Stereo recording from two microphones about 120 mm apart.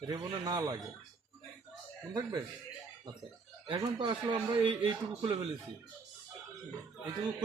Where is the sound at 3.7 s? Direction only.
45° right (ahead or behind).